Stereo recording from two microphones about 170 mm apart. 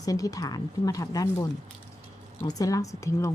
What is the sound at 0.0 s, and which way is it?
A woman's voice, 20° left (ahead or behind).